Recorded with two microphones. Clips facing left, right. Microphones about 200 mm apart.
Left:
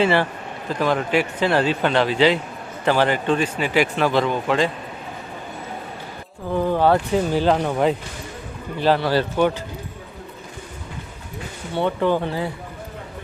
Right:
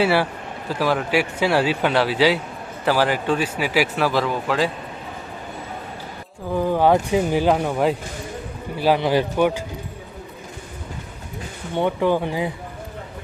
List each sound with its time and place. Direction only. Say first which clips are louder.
0.0 s speech: even; 10° right (ahead or behind)
6.5 s speech: even; 10° right (ahead or behind)
11.7 s speech: even; 15° right (ahead or behind)